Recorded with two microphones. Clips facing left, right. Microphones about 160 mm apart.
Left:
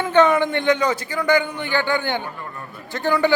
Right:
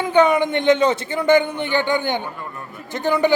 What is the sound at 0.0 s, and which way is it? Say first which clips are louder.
A man's voice: even; 15° right (ahead or behind).